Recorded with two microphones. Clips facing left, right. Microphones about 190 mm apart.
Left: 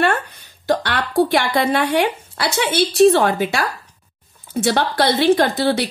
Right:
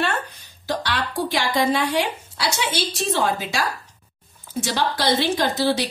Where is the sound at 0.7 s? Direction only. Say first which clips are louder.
Left 5 dB; 55° left (ahead or behind).